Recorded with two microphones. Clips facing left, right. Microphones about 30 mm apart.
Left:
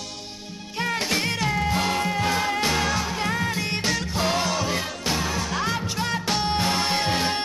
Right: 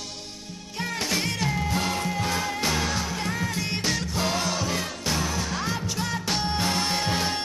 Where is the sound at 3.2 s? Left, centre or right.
Left.